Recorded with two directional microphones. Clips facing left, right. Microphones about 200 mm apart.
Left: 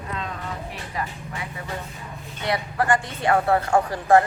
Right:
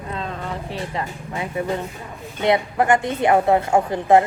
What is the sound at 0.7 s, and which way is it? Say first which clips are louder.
A woman's voice: right 4 dB; 30° right (ahead or behind).